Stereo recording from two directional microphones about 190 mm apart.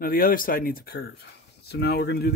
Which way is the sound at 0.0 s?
50° left (ahead or behind).